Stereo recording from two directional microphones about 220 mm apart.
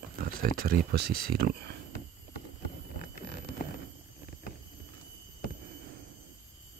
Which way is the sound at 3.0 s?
45° left (ahead or behind).